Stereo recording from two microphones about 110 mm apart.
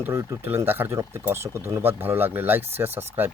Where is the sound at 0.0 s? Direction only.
25° right (ahead or behind).